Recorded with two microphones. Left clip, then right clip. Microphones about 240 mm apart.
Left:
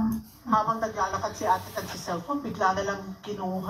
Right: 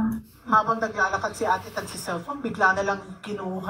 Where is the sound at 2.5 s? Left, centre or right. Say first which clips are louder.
Right 5 dB; right.